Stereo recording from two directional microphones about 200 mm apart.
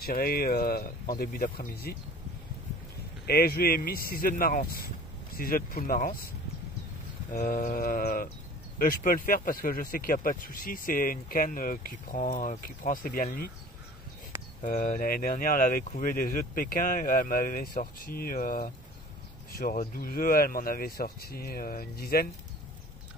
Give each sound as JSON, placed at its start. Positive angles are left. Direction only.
{"t": 0.0, "sound": "speech", "side_deg": 45}
{"t": 3.3, "sound": "speech", "side_deg": 50}
{"t": 7.3, "sound": "speech", "side_deg": 45}
{"t": 14.6, "sound": "speech", "side_deg": 45}